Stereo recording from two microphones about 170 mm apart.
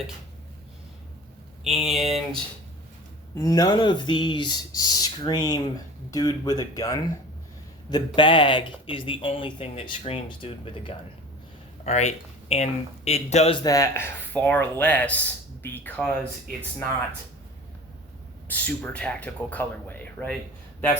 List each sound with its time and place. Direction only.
1.6 s speech: centre (ahead or behind)
2.0 s speech: 40° right (ahead or behind)
3.3 s speech: 20° left (ahead or behind); by 13.6 s 40° left (ahead or behind)
13.6 s speech: 20° left (ahead or behind)
18.4 s speech: 10° left (ahead or behind)